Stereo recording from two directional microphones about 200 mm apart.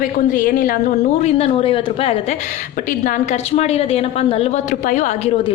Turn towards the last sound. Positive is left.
turn(degrees=40)  # may be behind; listen again after turning